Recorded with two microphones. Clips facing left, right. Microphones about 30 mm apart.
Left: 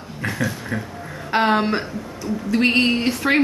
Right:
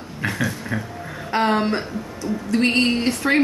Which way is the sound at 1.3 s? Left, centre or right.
Centre.